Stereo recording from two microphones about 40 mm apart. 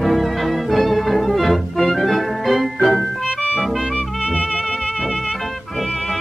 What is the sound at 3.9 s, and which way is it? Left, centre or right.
Music, left.